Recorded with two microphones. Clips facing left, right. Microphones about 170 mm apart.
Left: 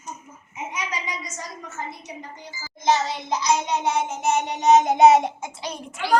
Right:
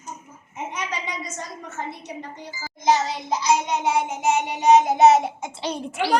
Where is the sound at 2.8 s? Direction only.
15° right (ahead or behind).